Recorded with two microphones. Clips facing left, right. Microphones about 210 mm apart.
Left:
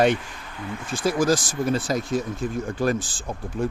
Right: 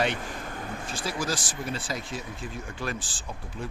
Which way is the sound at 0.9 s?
45° left (ahead or behind).